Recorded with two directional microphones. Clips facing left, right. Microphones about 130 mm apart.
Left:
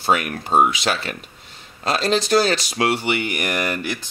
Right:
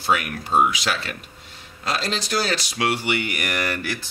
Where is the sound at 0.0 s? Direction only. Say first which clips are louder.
Left 2 dB; 35° left (ahead or behind).